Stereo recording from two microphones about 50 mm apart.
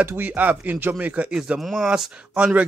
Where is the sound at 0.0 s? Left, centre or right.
Right.